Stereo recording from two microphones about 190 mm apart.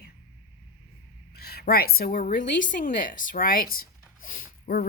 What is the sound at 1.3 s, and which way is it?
A woman's voice, 55° left (ahead or behind).